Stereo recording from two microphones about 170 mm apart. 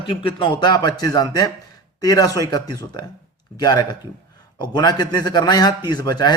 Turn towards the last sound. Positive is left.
turn(degrees=25)  # may be behind; listen again after turning